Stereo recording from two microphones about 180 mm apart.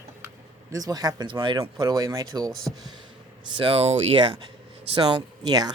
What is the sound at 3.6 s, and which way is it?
Speech, 30° right (ahead or behind).